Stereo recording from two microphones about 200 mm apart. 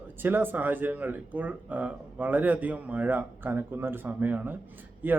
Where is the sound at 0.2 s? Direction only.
10° right (ahead or behind).